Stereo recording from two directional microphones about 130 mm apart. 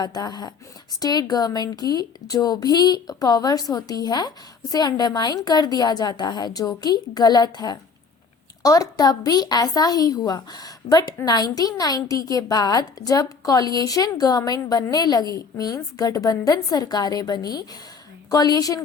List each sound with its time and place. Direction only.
0.0 s a woman's voice: 30° left (ahead or behind)